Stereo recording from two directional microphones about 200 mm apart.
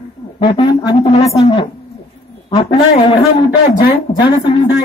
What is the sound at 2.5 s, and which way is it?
Speech, 25° left (ahead or behind).